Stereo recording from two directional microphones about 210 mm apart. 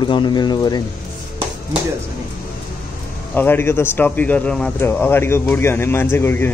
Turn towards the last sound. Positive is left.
turn(degrees=10)  # may be behind; listen again after turning